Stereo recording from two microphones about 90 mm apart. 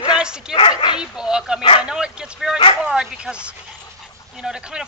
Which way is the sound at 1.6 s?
70° left (ahead or behind).